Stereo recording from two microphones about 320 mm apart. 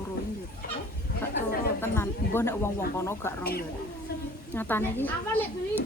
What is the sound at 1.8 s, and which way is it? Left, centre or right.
Speech, centre.